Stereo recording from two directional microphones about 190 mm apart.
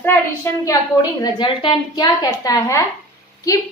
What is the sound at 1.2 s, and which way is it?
A woman's voice, 25° left (ahead or behind).